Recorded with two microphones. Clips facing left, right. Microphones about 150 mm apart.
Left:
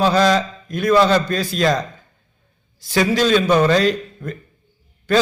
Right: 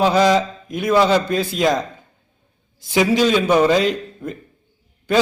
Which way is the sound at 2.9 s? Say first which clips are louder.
Even; 15° right (ahead or behind).